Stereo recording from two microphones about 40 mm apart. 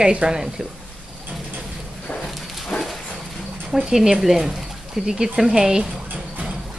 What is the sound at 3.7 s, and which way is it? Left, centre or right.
A woman's voice, centre.